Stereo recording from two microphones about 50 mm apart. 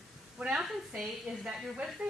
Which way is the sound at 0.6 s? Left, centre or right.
Centre.